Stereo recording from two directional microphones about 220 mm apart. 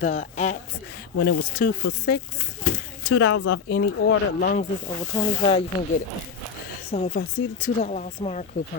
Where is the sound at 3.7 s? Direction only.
45° left (ahead or behind).